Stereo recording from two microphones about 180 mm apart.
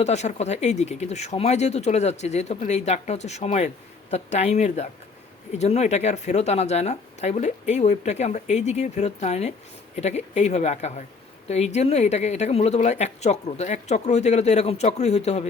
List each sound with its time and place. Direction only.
0.0 s speech: 40° left (ahead or behind)